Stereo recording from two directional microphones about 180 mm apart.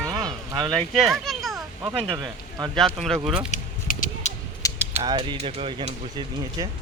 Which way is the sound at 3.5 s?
45° left (ahead or behind).